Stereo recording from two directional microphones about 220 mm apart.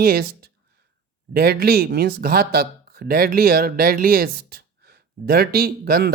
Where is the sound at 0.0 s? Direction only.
45° right (ahead or behind).